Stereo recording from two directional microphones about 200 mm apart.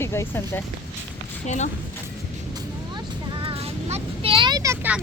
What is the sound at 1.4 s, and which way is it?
Speech, 35° left (ahead or behind).